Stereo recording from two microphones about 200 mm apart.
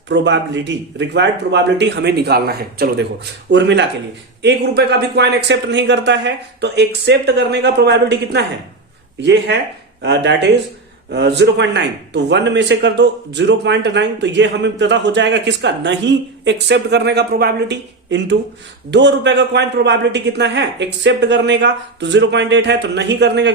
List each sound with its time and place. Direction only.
0.1 s a man's voice: 65° right (ahead or behind)